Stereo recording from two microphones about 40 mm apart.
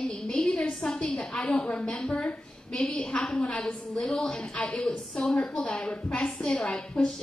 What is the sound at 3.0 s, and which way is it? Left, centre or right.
A woman's voice, left.